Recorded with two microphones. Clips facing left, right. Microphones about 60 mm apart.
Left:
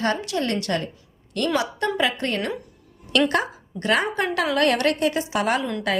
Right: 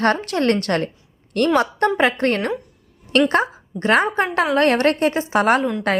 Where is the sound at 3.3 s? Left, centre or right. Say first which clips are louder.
Right 4 dB; right.